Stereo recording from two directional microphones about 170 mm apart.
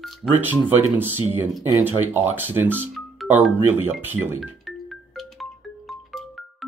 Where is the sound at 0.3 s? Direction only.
10° right (ahead or behind).